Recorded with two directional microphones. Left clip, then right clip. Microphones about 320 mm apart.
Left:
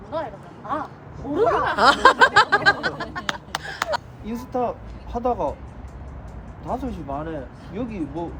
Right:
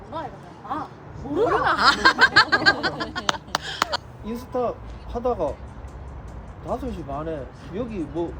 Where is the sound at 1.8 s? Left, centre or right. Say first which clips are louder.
Left 4 dB; centre.